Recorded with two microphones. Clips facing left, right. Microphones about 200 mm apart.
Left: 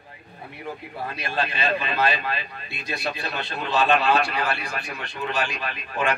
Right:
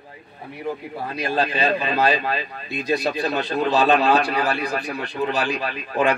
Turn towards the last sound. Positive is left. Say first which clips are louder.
# right 5 dB
turn(degrees=-35)  # may be behind; listen again after turning